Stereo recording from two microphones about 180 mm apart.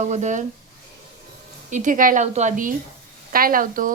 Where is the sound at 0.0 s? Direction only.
40° right (ahead or behind).